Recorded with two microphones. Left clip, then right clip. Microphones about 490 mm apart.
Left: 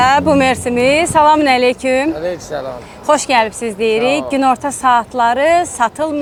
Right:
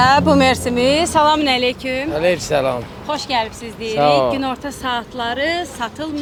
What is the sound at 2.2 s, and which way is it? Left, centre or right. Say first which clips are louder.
Speech: right 4 dB; right.